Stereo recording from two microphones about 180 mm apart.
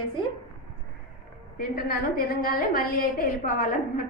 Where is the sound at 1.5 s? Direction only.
50° left (ahead or behind).